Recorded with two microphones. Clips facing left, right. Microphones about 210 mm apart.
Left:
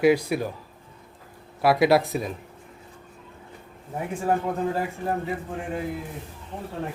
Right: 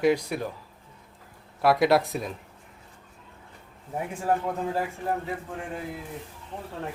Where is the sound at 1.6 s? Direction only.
5° left (ahead or behind).